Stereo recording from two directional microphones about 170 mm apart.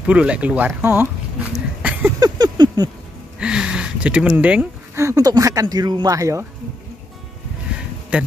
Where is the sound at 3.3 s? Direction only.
5° right (ahead or behind).